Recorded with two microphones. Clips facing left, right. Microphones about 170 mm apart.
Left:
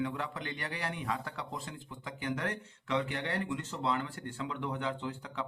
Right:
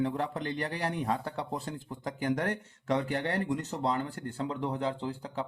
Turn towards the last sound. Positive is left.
turn(degrees=-35)  # may be behind; listen again after turning